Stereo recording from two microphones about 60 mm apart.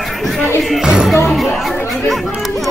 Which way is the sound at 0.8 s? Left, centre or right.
Centre.